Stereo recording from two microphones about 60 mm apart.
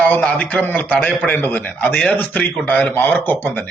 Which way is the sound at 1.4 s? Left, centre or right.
Left.